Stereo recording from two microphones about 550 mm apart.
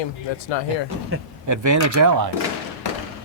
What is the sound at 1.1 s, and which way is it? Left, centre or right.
A man's voice, right.